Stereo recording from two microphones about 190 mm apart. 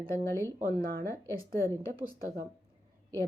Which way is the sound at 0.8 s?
50° right (ahead or behind).